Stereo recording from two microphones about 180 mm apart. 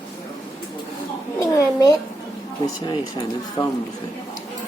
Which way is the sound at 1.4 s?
20° left (ahead or behind).